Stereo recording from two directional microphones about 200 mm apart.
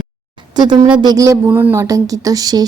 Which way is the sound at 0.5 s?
20° right (ahead or behind).